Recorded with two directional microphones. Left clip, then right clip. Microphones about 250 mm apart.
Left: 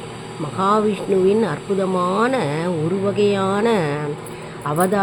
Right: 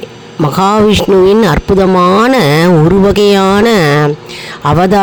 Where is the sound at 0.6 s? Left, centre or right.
Right.